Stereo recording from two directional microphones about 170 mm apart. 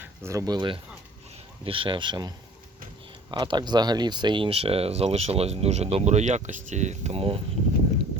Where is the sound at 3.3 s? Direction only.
25° right (ahead or behind).